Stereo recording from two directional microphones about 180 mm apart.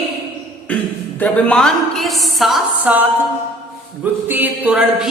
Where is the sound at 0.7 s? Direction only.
10° left (ahead or behind); by 3.1 s 10° right (ahead or behind).